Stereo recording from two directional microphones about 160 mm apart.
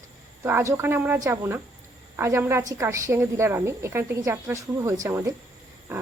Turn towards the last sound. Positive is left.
turn(degrees=-20)  # may be behind; listen again after turning